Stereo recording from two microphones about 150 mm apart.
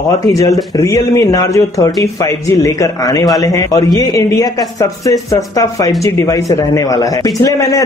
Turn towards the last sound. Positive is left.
turn(degrees=25)  # may be behind; listen again after turning